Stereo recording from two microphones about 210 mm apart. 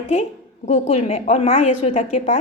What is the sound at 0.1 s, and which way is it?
A woman's voice, 30° left (ahead or behind).